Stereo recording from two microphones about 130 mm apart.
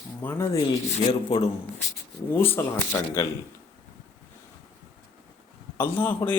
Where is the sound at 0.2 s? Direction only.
20° left (ahead or behind).